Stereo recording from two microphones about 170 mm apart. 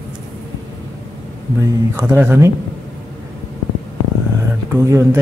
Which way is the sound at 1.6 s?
15° right (ahead or behind).